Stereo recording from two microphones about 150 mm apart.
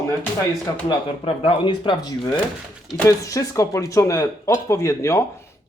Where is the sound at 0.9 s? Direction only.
35° left (ahead or behind).